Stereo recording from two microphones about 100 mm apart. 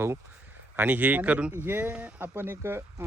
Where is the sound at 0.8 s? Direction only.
15° right (ahead or behind).